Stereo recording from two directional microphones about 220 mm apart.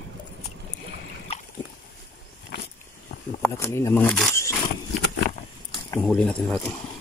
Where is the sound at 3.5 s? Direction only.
10° left (ahead or behind).